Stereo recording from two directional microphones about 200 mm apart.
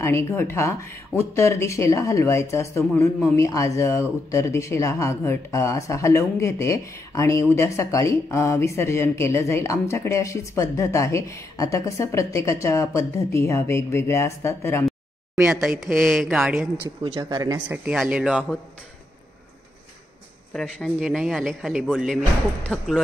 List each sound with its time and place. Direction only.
0.0 s speech: 15° left (ahead or behind)
15.4 s a man's voice: centre (ahead or behind)
17.0 s speech: 20° right (ahead or behind)
17.6 s a man's voice: 5° right (ahead or behind)
20.5 s a man's voice: 5° left (ahead or behind)